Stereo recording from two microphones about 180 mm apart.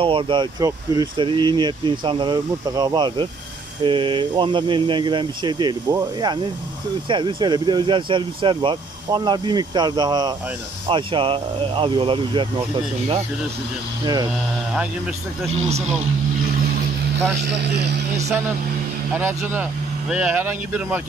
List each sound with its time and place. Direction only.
0.0 s speech: 30° right (ahead or behind)
17.4 s a man's voice: 70° right (ahead or behind)
19.1 s speech: 10° right (ahead or behind)